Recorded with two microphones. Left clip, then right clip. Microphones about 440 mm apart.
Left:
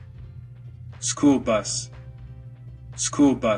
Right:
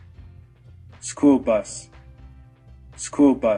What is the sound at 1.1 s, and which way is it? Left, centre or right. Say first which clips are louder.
Speech: right 2 dB; left.